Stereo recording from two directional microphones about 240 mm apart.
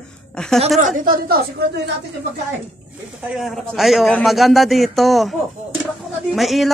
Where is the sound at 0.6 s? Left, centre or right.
Right.